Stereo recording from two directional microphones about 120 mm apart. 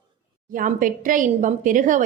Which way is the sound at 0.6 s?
90° right.